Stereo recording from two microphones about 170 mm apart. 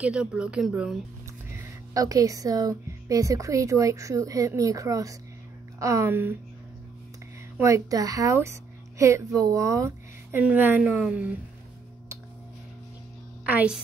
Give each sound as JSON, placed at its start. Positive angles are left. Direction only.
{"t": 0.0, "sound": "a woman's voice", "side_deg": -5}
{"t": 1.5, "sound": "a woman's voice", "side_deg": -20}
{"t": 7.5, "sound": "a woman's voice", "side_deg": -20}
{"t": 13.5, "sound": "a woman's voice", "side_deg": -10}